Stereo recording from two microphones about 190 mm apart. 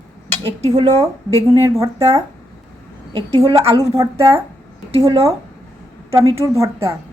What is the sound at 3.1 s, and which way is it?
Speech, 30° right (ahead or behind).